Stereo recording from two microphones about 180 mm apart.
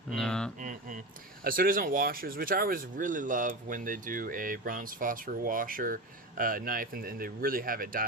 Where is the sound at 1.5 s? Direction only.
50° right (ahead or behind).